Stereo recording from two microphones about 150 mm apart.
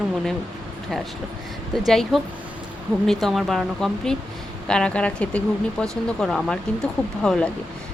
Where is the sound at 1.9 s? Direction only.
Centre (ahead or behind).